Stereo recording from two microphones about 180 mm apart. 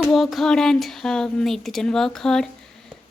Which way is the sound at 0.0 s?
Centre (ahead or behind).